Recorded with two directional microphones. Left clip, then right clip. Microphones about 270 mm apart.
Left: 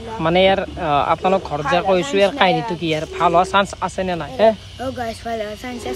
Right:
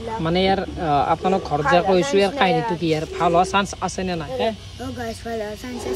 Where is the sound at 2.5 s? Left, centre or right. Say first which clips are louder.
Left 2 dB; left.